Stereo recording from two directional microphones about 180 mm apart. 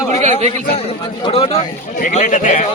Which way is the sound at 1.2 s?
30° left (ahead or behind).